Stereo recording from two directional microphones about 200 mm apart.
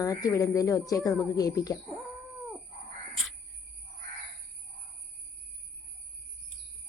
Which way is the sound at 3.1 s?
Centre (ahead or behind).